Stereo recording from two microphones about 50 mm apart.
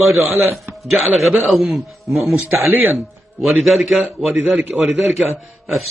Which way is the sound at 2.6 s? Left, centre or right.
Right.